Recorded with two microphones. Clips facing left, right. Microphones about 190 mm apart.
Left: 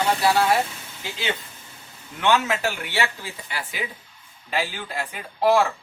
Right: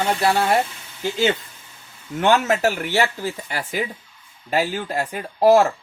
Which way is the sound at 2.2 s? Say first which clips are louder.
Right 4 dB; 45° right (ahead or behind).